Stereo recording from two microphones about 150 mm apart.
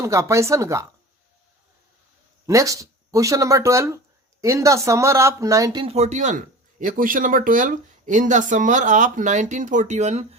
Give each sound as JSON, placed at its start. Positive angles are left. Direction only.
{"t": 0.0, "sound": "speech", "side_deg": -20}
{"t": 2.5, "sound": "speech", "side_deg": -20}
{"t": 5.8, "sound": "speech", "side_deg": -45}